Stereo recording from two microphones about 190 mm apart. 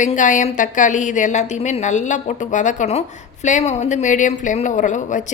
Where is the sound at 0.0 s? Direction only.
40° left (ahead or behind).